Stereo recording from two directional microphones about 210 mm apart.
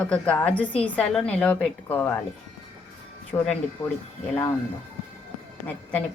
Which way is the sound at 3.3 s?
15° left (ahead or behind).